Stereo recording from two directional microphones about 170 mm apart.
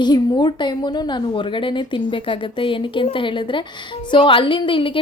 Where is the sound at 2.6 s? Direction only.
30° left (ahead or behind).